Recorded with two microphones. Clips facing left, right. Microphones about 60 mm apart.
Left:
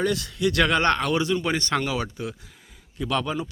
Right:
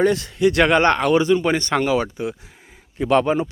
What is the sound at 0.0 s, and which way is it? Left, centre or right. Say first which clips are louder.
Speech: right 7 dB; right.